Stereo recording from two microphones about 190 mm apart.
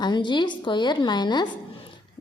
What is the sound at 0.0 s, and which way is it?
A woman's voice, 25° left (ahead or behind).